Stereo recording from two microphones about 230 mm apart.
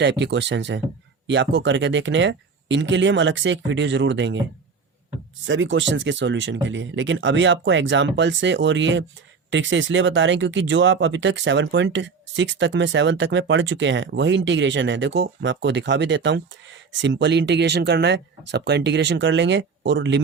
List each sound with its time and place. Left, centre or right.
0.0 s speech: right
5.5 s speech: right